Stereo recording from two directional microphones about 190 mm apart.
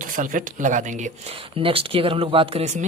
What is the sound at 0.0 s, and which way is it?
Speech, 45° right (ahead or behind).